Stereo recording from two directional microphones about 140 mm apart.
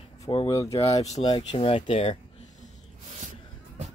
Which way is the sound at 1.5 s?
45° left (ahead or behind).